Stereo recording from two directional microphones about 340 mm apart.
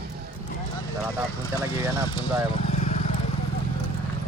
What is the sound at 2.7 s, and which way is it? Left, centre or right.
Vehicle, left.